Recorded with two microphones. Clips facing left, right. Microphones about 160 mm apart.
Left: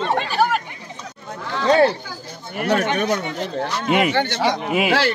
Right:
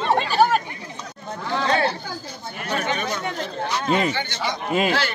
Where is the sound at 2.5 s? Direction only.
70° left (ahead or behind).